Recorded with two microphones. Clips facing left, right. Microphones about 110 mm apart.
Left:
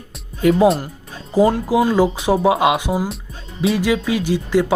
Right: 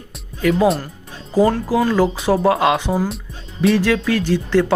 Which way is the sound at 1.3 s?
15° left (ahead or behind).